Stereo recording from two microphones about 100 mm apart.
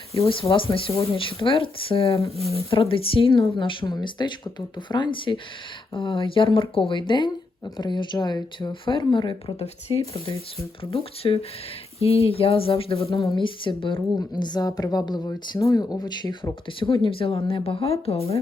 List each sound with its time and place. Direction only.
0.2 s a woman's voice: 65° left (ahead or behind)
10.9 s speech: 75° left (ahead or behind)
13.3 s a woman's voice: 55° left (ahead or behind); by 18.3 s 90° left